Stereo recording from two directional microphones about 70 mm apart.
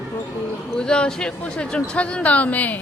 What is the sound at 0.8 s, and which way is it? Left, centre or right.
Speech, centre.